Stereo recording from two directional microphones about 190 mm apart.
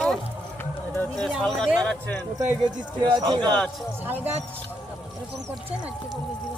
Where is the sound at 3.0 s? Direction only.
25° right (ahead or behind).